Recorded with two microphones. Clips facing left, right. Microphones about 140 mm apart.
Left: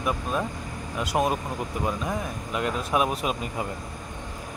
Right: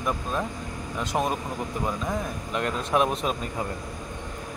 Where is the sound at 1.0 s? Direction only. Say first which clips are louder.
Left 2 dB; 10° left (ahead or behind).